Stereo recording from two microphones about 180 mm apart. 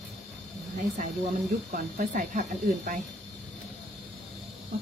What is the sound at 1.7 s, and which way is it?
Speech, 45° right (ahead or behind).